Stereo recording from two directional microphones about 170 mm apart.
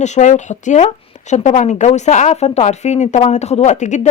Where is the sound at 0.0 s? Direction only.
45° left (ahead or behind).